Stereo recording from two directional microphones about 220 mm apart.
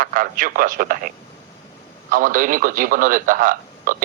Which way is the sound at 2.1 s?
40° right (ahead or behind).